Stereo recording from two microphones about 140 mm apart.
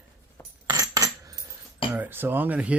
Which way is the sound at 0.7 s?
25° right (ahead or behind).